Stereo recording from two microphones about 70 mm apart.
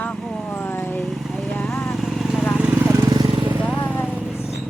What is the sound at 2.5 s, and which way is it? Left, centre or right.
Vehicle, centre.